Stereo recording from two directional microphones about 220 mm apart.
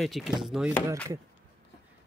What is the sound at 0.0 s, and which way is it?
Speech, centre (ahead or behind).